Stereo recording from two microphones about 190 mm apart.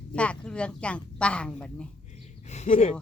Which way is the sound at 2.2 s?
35° left (ahead or behind).